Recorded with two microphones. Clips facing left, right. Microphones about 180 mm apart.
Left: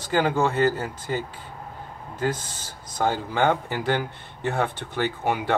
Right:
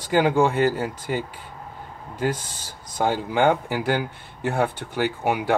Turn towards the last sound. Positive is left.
turn(degrees=-10)  # may be behind; listen again after turning